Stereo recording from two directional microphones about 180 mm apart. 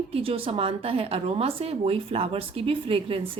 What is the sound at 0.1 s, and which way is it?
A woman's voice, 30° right (ahead or behind).